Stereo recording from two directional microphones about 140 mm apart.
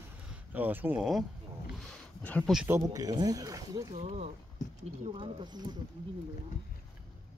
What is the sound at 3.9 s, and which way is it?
Speech, 50° right (ahead or behind).